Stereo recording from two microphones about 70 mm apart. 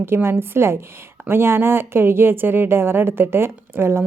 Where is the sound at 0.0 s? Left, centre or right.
Right.